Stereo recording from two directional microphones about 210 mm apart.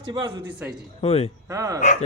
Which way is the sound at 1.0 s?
30° left (ahead or behind).